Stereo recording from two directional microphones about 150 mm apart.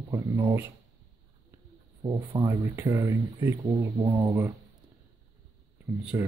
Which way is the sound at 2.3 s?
30° right (ahead or behind).